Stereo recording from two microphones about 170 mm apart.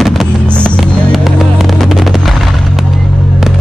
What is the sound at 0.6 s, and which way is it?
Music, 5° left (ahead or behind).